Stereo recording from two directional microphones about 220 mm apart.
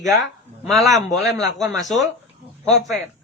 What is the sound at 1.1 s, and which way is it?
Speech, 15° right (ahead or behind).